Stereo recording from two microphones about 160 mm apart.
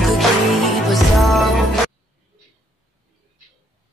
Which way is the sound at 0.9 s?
Centre (ahead or behind).